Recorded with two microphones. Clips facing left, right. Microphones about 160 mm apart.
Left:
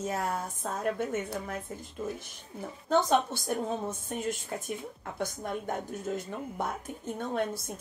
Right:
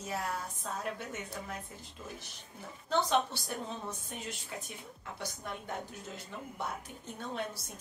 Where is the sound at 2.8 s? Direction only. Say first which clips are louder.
Left 5 dB; 45° left (ahead or behind).